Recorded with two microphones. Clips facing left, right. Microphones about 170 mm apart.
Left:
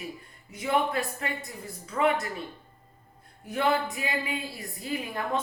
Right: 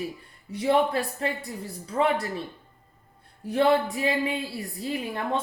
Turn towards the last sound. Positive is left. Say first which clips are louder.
# right 2 dB
turn(degrees=-30)  # may be behind; listen again after turning